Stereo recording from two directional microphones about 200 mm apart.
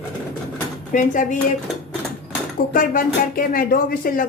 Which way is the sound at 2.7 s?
45° left (ahead or behind).